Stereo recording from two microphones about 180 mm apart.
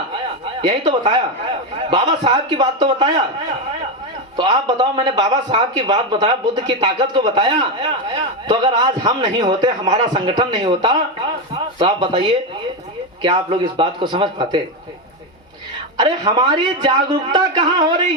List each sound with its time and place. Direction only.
0.6 s a man's voice: 25° right (ahead or behind)
4.4 s a man's voice: 25° right (ahead or behind)
16.0 s a man's voice: 25° right (ahead or behind)